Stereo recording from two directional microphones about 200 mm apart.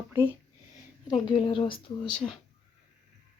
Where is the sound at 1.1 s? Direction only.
20° left (ahead or behind).